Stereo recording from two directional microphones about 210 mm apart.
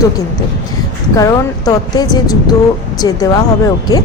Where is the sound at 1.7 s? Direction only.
20° left (ahead or behind).